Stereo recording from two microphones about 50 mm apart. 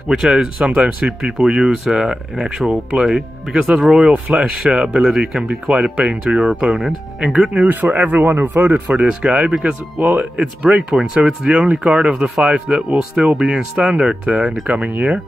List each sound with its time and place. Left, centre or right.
0.1 s speech: centre
2.7 s speech: right
3.1 s speech: centre
4.0 s speech: right
7.5 s speech: right
9.2 s speech: centre